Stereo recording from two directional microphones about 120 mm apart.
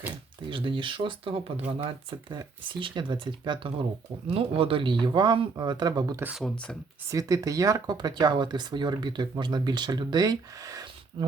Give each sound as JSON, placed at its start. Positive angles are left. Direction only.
{"t": 0.5, "sound": "speech", "side_deg": -45}